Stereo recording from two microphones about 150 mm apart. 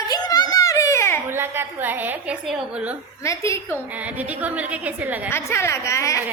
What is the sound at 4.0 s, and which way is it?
A woman's voice, 10° right (ahead or behind).